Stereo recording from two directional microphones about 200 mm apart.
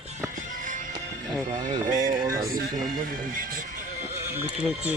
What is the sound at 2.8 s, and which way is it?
Speech, 45° right (ahead or behind).